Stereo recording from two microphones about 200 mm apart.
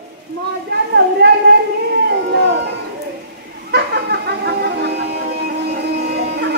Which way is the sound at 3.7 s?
55° right (ahead or behind).